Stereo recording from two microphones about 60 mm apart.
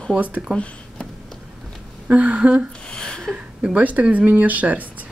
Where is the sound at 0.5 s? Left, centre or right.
Centre.